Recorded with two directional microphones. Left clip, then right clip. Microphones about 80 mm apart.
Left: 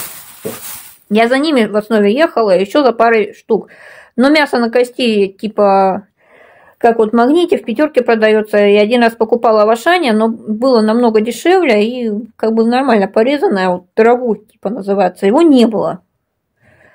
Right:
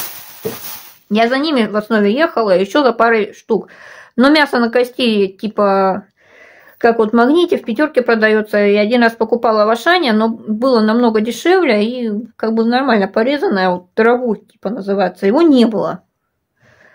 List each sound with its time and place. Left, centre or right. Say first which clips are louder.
1.1 s speech: left 3 dB; left
1.6 s speech: left 3 dB; left
7.3 s speech: left 1 dB; left